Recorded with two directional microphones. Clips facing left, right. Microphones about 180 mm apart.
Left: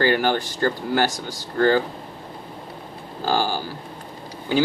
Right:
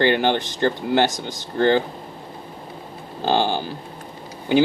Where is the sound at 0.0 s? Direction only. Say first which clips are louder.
Right 1 dB; 20° right (ahead or behind).